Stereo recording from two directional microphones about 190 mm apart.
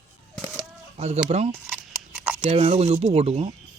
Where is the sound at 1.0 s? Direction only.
35° right (ahead or behind).